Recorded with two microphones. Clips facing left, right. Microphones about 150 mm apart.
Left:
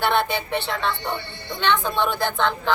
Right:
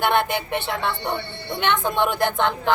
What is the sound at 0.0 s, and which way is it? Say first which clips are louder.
Speech: right 1 dB; 15° right (ahead or behind).